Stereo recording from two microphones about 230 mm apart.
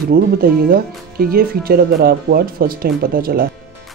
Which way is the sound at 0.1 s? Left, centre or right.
Right.